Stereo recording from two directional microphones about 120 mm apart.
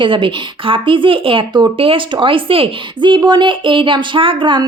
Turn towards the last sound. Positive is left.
turn(degrees=-45)  # may be behind; listen again after turning